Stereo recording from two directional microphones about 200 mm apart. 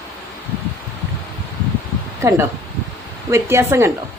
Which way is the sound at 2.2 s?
15° right (ahead or behind).